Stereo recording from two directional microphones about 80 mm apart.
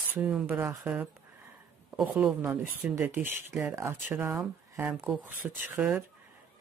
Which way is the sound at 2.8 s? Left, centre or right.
Centre.